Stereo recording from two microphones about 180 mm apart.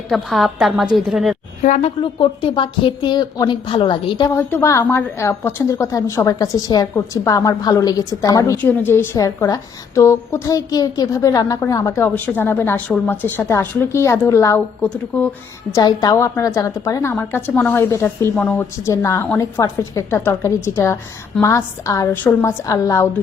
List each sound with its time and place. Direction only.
0.1 s a woman's voice: centre (ahead or behind)
1.6 s a woman's voice: 40° left (ahead or behind)
2.0 s speech: 30° left (ahead or behind)
4.4 s a woman's voice: 15° left (ahead or behind)
15.7 s a woman's voice: 20° left (ahead or behind)